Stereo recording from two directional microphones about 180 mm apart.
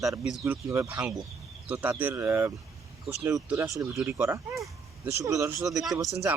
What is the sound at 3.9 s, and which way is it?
Speech, 5° right (ahead or behind).